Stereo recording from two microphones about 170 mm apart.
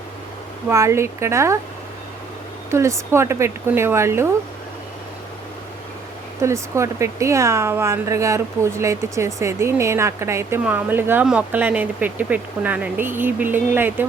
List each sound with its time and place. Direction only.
0.7 s speech: 15° right (ahead or behind)
2.6 s speech: 15° right (ahead or behind)
6.4 s speech: 15° right (ahead or behind)